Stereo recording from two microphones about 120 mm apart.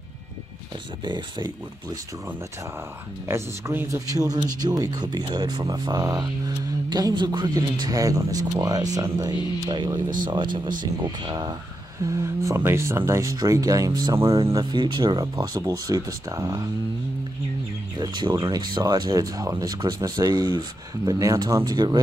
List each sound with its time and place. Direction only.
1.0 s speech: 40° right (ahead or behind)
3.3 s speech: 20° right (ahead or behind)
12.1 s speech: 25° right (ahead or behind)
14.2 s speech: 50° right (ahead or behind)
14.5 s speech: 35° right (ahead or behind)
17.9 s speech: 35° right (ahead or behind)